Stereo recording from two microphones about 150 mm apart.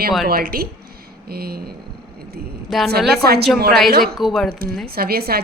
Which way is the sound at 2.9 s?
90° right.